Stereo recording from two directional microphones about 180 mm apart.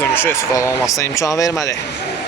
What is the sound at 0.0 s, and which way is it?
Speech, 10° left (ahead or behind).